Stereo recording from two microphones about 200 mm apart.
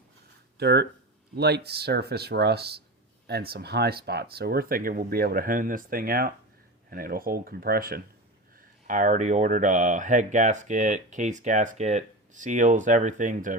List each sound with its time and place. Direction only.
0.6 s speech: 55° right (ahead or behind)